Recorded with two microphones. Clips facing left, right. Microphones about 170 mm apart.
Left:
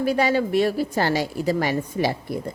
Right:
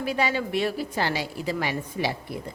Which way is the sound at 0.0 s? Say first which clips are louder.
Left 6 dB; 40° left (ahead or behind).